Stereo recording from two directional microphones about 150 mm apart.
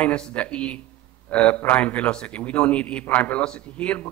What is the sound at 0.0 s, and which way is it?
A man's voice, 5° left (ahead or behind).